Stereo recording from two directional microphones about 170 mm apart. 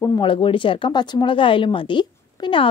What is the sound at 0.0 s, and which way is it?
Speech, 25° left (ahead or behind).